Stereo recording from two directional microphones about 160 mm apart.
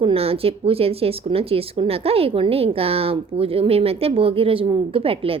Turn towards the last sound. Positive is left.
turn(degrees=-35)  # may be behind; listen again after turning